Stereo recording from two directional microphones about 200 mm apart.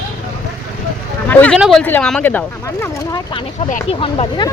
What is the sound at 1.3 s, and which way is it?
Speech, 10° left (ahead or behind).